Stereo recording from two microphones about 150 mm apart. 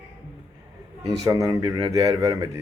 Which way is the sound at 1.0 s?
25° right (ahead or behind).